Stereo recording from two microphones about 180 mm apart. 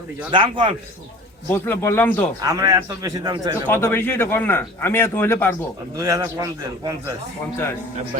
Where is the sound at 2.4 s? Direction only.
20° right (ahead or behind).